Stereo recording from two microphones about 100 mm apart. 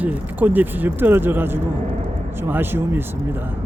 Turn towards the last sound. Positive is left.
turn(degrees=-20)  # may be behind; listen again after turning